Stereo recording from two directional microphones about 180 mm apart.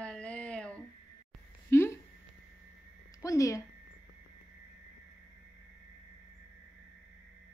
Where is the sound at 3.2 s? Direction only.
20° left (ahead or behind).